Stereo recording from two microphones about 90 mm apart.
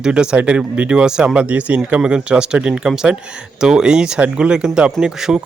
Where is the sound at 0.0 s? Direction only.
10° right (ahead or behind).